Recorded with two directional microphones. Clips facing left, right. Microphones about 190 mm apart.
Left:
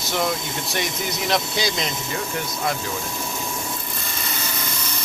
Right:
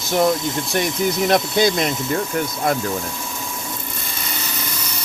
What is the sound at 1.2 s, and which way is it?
Speech, 50° right (ahead or behind).